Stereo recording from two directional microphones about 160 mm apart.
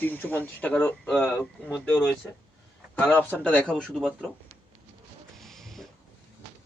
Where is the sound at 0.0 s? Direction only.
10° left (ahead or behind).